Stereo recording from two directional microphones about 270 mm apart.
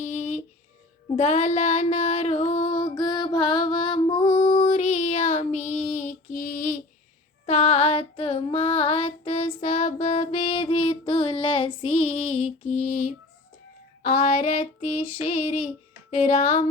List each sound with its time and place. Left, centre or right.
0.0 s a sound: left
1.1 s female singing: left
7.4 s child singing: left
11.8 s female singing: left
14.0 s female singing: left